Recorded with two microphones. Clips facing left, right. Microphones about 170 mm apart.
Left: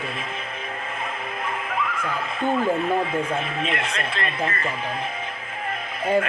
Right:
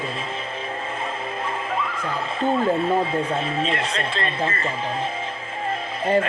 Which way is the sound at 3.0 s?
30° right (ahead or behind).